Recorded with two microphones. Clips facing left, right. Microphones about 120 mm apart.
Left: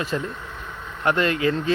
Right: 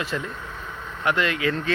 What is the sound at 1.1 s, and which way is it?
Speech, 35° left (ahead or behind).